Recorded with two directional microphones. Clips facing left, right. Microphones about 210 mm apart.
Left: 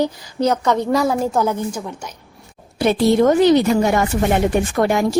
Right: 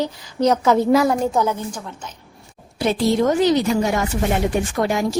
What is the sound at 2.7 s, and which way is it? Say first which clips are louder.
A woman's voice: left 4 dB; 60° left (ahead or behind).